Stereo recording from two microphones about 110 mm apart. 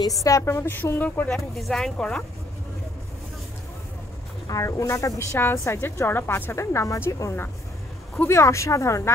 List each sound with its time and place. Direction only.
0.2 s a woman's voice: 30° left (ahead or behind); by 2.2 s 5° left (ahead or behind)
4.5 s a woman's voice: 30° left (ahead or behind)